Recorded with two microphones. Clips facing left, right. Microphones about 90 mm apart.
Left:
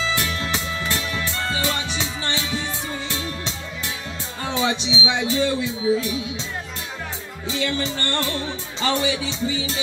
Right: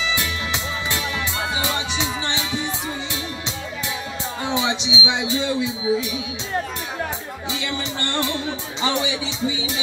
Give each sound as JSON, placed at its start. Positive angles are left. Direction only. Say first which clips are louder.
{"t": 0.1, "sound": "music", "louder": "left 1 dB", "side_deg": -20}
{"t": 4.5, "sound": "speech", "louder": "left 1 dB", "side_deg": -20}
{"t": 7.4, "sound": "speech", "louder": "left 4 dB", "side_deg": -15}